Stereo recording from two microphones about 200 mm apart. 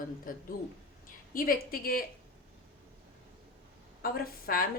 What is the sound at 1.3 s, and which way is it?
Speech, 45° left (ahead or behind).